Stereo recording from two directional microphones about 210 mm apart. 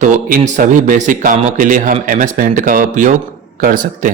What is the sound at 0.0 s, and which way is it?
A man's voice, 35° right (ahead or behind).